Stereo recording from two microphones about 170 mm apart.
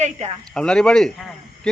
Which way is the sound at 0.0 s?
40° right (ahead or behind).